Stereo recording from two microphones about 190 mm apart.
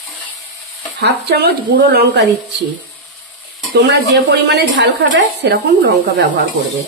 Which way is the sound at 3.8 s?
60° right (ahead or behind).